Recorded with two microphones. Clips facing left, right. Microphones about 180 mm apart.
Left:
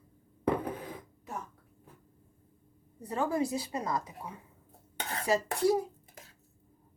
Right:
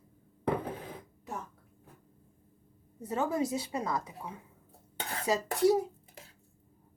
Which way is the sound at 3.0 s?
25° right (ahead or behind).